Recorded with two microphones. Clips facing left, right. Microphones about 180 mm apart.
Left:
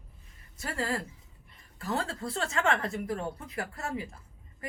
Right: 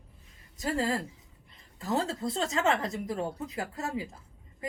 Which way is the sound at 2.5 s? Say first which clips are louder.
Even; 20° right (ahead or behind).